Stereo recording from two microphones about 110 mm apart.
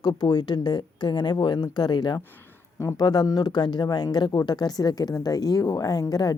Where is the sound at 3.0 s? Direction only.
35° left (ahead or behind).